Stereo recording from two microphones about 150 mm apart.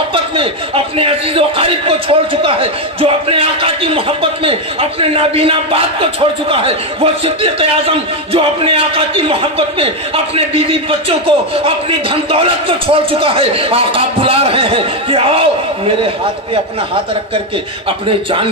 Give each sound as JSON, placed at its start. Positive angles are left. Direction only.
{"t": 0.1, "sound": "a man's voice", "side_deg": -40}
{"t": 17.8, "sound": "a man's voice", "side_deg": -35}